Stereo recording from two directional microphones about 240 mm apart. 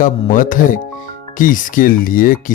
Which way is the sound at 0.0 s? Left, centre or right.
Left.